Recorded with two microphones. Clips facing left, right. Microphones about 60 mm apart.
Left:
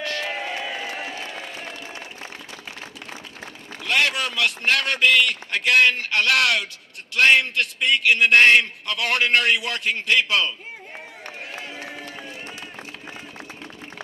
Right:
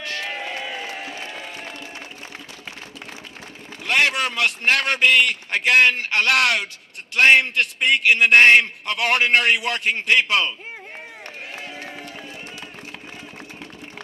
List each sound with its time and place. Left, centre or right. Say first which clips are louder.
0.5 s a sound: left 1 dB; centre
0.9 s crowd: left 1 dB; left
3.8 s a man's voice: right 2 dB; right